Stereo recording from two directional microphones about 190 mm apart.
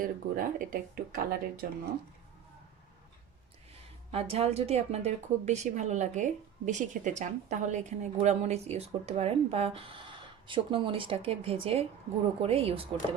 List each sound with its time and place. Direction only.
0.0 s speech: 50° right (ahead or behind)
4.1 s a woman's voice: 30° right (ahead or behind)